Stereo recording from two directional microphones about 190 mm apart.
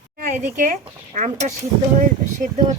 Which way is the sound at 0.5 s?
45° right (ahead or behind).